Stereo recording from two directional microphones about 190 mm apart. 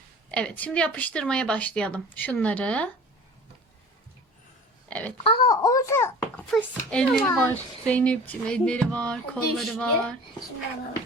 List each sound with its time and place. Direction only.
0.3 s speech: 5° left (ahead or behind)
4.9 s a child's voice: 5° left (ahead or behind)
5.2 s speech: 25° left (ahead or behind)
6.5 s speech: 5° left (ahead or behind)